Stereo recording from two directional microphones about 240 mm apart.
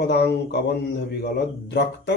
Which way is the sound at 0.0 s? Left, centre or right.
Left.